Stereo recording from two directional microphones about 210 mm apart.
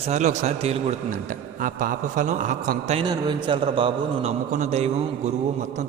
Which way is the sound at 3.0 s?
20° right (ahead or behind).